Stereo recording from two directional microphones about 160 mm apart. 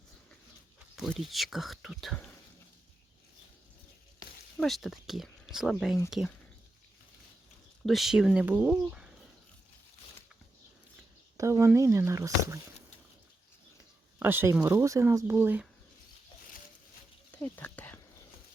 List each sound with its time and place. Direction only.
0.9 s speech: centre (ahead or behind)
4.6 s speech: centre (ahead or behind)
7.9 s speech: centre (ahead or behind)
11.3 s speech: 20° right (ahead or behind)
14.2 s speech: 15° right (ahead or behind)
17.6 s a sound: 10° left (ahead or behind)